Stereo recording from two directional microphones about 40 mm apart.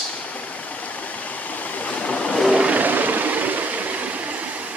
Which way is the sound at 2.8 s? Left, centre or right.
Right.